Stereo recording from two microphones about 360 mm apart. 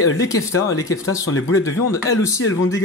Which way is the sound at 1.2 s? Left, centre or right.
Left.